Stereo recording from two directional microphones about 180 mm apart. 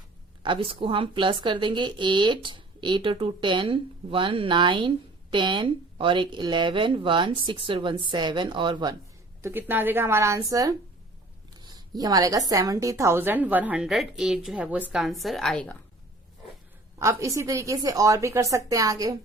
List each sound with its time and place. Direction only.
0.4 s speech: 30° right (ahead or behind)
9.4 s a woman's voice: 10° right (ahead or behind); by 15.8 s 5° left (ahead or behind)
17.0 s a woman's voice: 15° right (ahead or behind)